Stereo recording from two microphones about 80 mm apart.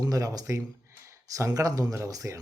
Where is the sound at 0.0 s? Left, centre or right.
Right.